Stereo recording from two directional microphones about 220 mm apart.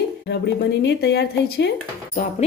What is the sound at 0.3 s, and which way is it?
A woman's voice, 50° left (ahead or behind).